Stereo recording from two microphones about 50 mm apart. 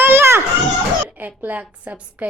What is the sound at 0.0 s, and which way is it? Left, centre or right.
Children playing, right.